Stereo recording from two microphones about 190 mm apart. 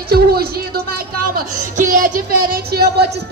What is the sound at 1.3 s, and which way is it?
Speech, 45° right (ahead or behind).